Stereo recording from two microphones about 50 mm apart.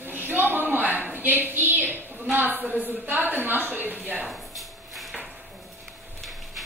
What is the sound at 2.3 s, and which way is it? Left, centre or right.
A woman's voice, right.